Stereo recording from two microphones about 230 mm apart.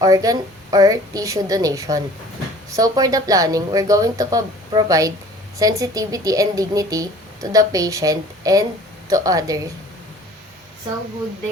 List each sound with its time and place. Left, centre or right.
0.0 s a woman's voice: centre